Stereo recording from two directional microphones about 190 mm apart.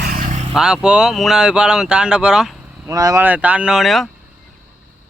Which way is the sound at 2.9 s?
20° right (ahead or behind).